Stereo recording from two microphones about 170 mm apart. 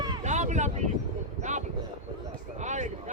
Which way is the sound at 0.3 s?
45° right (ahead or behind).